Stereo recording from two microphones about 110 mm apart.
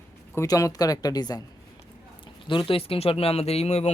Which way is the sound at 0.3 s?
30° left (ahead or behind).